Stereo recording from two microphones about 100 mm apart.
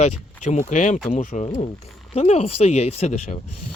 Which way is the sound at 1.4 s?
90° left.